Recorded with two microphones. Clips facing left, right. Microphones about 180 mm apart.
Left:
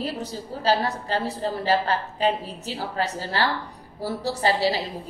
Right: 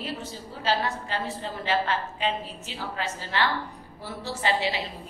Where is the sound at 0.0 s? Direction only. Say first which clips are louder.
Left 5 dB; 40° left (ahead or behind).